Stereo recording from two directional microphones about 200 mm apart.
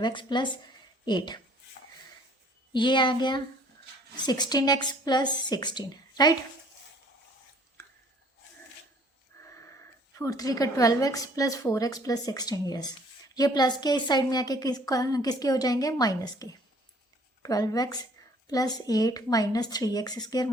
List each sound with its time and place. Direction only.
0.0 s a woman's voice: 25° left (ahead or behind)
2.7 s a woman's voice: 25° left (ahead or behind)
9.3 s a sound: 15° left (ahead or behind)
10.2 s a woman's voice: 15° left (ahead or behind)